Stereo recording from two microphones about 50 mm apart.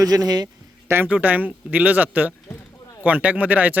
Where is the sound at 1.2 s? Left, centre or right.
Right.